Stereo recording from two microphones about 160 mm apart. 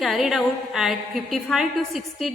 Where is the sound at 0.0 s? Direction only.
Centre (ahead or behind).